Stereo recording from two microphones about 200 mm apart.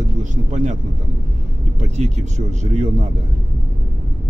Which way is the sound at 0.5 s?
35° right (ahead or behind).